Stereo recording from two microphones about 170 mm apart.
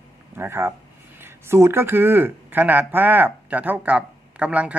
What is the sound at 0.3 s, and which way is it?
Speech, 15° right (ahead or behind).